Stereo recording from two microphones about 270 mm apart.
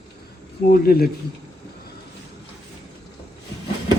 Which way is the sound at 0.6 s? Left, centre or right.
Left.